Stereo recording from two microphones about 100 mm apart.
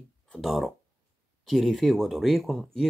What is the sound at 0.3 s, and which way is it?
Speech, centre (ahead or behind).